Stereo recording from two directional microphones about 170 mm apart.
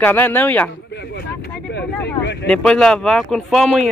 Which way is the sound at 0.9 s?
80° left.